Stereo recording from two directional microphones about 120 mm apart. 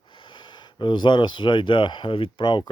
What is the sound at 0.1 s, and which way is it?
Speech, 40° left (ahead or behind).